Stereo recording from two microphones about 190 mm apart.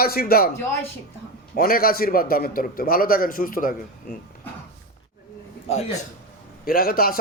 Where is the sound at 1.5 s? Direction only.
50° left (ahead or behind).